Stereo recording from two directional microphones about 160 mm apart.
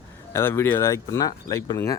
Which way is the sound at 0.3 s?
15° left (ahead or behind).